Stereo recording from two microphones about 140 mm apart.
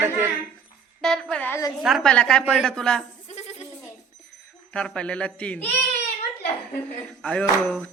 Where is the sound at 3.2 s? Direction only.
50° left (ahead or behind).